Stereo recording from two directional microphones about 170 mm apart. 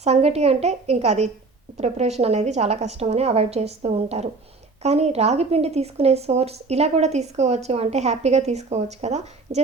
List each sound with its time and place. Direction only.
0.0 s speech: 40° right (ahead or behind)